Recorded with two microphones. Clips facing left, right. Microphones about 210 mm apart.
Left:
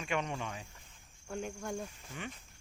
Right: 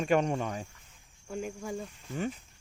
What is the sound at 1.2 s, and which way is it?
Speech, centre (ahead or behind).